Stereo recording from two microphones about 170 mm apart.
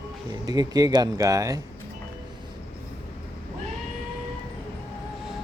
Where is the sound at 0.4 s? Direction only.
20° right (ahead or behind).